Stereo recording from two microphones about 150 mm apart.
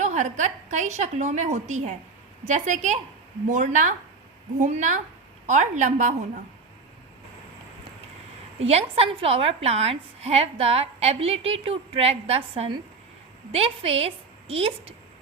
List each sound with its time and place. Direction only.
0.0 s a woman's voice: 50° right (ahead or behind)
8.5 s a woman's voice: 40° right (ahead or behind)